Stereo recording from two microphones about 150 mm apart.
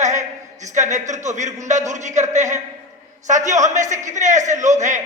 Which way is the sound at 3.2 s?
55° right (ahead or behind).